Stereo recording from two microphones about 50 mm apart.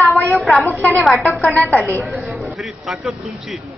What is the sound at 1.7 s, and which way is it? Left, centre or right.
Speech, left.